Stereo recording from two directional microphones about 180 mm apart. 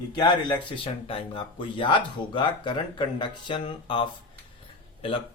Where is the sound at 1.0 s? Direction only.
30° left (ahead or behind).